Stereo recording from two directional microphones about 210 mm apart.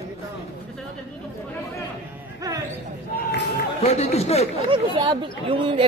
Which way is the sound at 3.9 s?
30° left (ahead or behind).